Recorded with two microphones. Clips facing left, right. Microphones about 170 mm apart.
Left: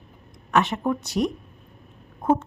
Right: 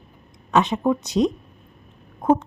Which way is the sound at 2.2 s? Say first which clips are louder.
Right 3 dB; 15° right (ahead or behind).